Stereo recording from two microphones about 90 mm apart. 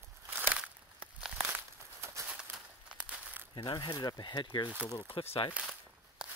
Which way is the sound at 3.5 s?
60° left (ahead or behind).